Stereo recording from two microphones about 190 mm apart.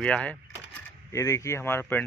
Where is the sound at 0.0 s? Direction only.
5° left (ahead or behind).